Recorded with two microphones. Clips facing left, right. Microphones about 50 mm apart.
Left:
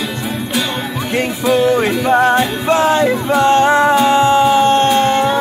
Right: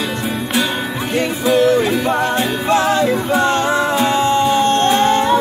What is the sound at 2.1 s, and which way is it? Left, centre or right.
Music, left.